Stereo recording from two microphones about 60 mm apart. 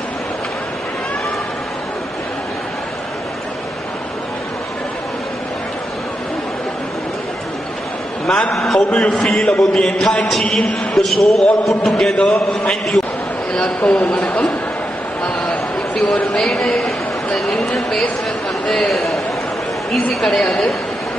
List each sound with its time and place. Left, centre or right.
8.3 s music: centre
8.5 s speech: centre
8.9 s music: centre
11.0 s speech: centre
12.1 s speech: centre
15.2 s a sound: centre
16.3 s a man's voice: centre
20.2 s music: centre